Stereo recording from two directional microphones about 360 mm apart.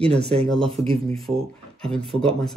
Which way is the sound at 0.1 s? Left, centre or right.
Centre.